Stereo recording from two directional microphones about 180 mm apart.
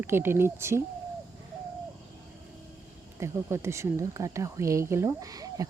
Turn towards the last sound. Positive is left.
turn(degrees=-20)  # may be behind; listen again after turning